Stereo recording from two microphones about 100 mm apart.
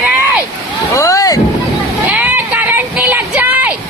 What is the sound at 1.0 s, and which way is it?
Boat, 35° left (ahead or behind).